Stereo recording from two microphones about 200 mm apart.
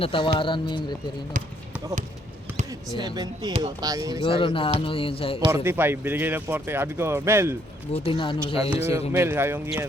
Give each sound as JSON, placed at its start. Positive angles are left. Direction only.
{"t": 0.0, "sound": "speech", "side_deg": 25}
{"t": 2.6, "sound": "speech", "side_deg": -20}
{"t": 4.2, "sound": "speech", "side_deg": 25}
{"t": 5.4, "sound": "speech", "side_deg": -15}
{"t": 7.9, "sound": "speech", "side_deg": 25}
{"t": 8.7, "sound": "speech", "side_deg": -15}